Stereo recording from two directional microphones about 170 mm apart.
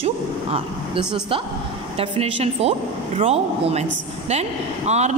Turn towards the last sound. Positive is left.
turn(degrees=-40)  # may be behind; listen again after turning